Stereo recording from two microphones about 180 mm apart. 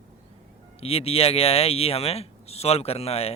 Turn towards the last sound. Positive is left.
turn(degrees=35)  # may be behind; listen again after turning